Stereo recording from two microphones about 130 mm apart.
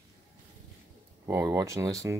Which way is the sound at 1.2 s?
20° right (ahead or behind).